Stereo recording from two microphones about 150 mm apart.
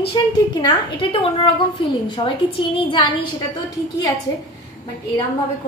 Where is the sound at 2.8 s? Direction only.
35° left (ahead or behind).